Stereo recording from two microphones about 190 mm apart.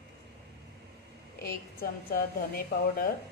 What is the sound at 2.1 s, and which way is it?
Speech, 55° left (ahead or behind).